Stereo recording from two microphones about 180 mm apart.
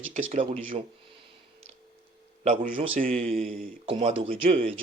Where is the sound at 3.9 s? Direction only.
30° right (ahead or behind).